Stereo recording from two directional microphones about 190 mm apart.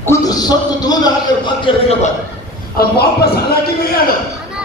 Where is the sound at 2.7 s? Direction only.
55° left (ahead or behind).